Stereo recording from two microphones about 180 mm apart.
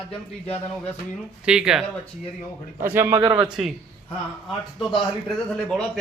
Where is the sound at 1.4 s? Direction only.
5° right (ahead or behind).